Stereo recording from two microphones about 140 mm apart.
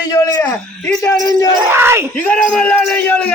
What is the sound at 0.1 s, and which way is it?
A man's voice, 25° left (ahead or behind).